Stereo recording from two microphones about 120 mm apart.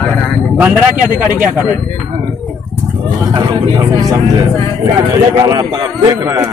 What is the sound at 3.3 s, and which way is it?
Speech, 30° right (ahead or behind).